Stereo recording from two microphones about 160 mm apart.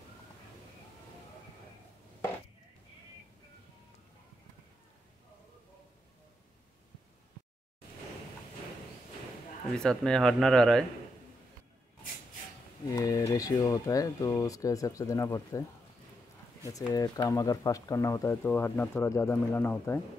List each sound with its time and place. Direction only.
9.8 s speech: 5° left (ahead or behind)
12.9 s speech: 20° left (ahead or behind)
16.6 s speech: 20° left (ahead or behind)